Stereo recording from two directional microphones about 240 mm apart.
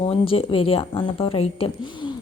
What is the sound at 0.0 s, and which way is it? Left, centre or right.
A woman's voice, left.